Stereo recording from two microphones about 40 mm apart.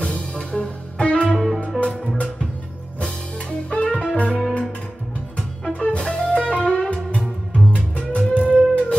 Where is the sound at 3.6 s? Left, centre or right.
Left.